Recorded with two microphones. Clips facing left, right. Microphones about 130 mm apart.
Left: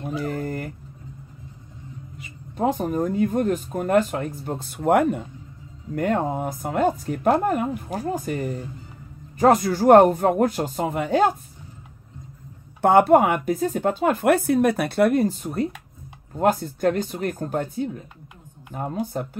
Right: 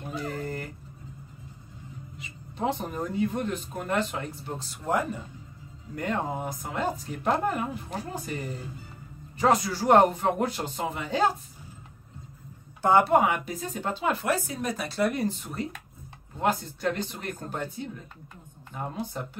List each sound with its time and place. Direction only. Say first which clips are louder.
0.3 s a sound: left 5 dB; 50° left (ahead or behind)
2.1 s speech: left 7 dB; 45° left (ahead or behind)
5.9 s speech: left 7 dB; 50° left (ahead or behind)
12.8 s speech: left 6 dB; 55° left (ahead or behind)
15.2 s speech: left 7 dB; 45° left (ahead or behind)